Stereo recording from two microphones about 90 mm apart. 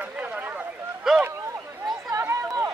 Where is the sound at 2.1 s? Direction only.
30° right (ahead or behind).